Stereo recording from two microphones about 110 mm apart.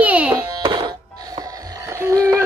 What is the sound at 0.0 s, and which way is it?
Music, 15° right (ahead or behind).